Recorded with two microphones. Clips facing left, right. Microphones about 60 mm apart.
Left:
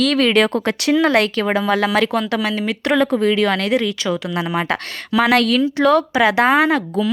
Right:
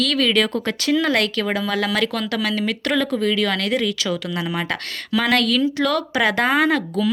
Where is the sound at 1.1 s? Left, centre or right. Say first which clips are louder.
Left 4 dB; left.